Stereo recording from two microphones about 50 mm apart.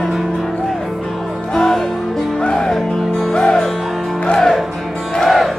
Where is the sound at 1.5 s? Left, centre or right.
Centre.